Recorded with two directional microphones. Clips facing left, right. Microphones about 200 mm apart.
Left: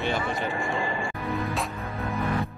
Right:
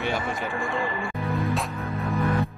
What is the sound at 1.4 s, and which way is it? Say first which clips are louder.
Music: right 3 dB; centre (ahead or behind).